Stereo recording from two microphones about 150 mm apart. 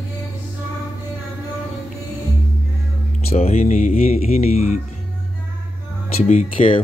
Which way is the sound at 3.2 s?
45° left (ahead or behind).